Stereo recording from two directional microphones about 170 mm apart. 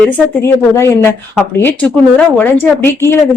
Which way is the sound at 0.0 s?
15° left (ahead or behind).